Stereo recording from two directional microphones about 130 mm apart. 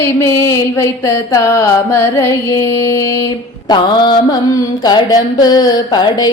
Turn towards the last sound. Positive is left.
turn(degrees=30)  # may be behind; listen again after turning